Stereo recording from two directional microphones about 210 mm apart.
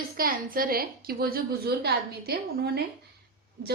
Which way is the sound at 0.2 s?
45° right (ahead or behind).